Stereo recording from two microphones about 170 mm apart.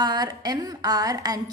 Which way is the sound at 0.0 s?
25° right (ahead or behind).